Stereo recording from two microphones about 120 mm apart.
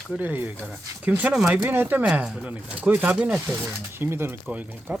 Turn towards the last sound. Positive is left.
turn(degrees=-15)  # may be behind; listen again after turning